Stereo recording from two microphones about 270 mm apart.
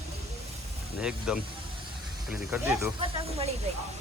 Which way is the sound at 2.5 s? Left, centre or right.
Centre.